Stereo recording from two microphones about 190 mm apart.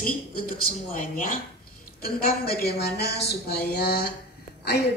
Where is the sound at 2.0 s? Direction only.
55° left (ahead or behind).